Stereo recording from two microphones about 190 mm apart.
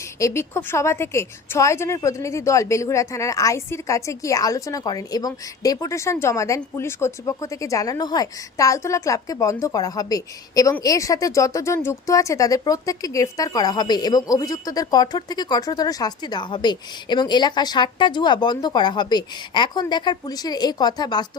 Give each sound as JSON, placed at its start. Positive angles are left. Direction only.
{"t": 0.2, "sound": "speech", "side_deg": 15}